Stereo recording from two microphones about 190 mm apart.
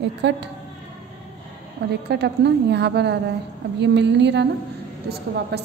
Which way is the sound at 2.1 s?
60° right (ahead or behind).